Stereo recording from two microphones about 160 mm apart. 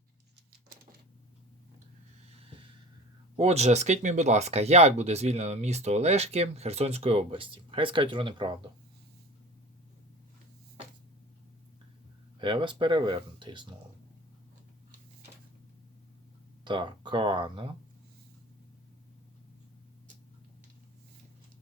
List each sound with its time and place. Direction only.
3.3 s speech: 40° right (ahead or behind)
12.4 s speech: 30° right (ahead or behind)
16.6 s speech: 30° right (ahead or behind)